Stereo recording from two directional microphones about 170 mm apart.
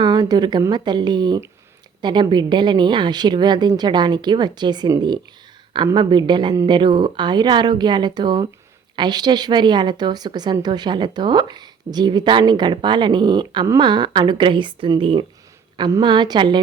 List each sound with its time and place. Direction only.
0.0 s a woman's voice: 25° right (ahead or behind)